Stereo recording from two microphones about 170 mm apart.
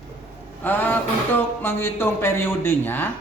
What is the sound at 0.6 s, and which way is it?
A man's voice, 10° left (ahead or behind).